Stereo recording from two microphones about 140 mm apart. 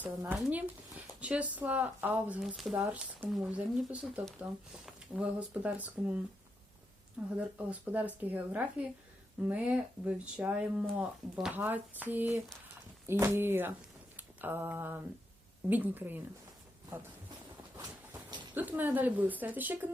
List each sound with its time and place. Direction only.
0.0 s speech: 10° right (ahead or behind)
2.6 s speech: centre (ahead or behind)
2.8 s speech: 15° right (ahead or behind)
7.3 s speech: 10° right (ahead or behind)
14.2 s a sound: 15° right (ahead or behind)
15.7 s speech: 15° right (ahead or behind)
18.5 s speech: 10° right (ahead or behind)